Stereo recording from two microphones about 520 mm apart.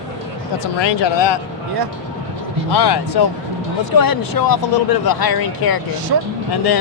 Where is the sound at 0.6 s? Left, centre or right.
Left.